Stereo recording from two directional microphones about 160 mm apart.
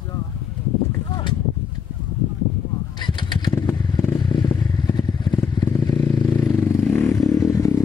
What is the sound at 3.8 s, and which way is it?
Motorcycle, 20° left (ahead or behind).